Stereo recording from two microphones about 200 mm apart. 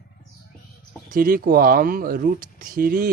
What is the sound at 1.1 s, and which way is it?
Speech, 45° right (ahead or behind).